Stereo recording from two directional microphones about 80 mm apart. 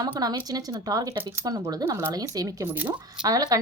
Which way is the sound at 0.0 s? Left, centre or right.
Right.